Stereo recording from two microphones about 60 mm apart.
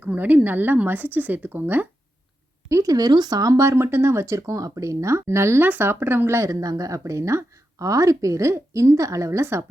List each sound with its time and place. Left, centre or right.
0.0 s a woman's voice: right
2.6 s speech: right
3.6 s speech: right
5.6 s speech: right
6.5 s speech: right
9.4 s speech: right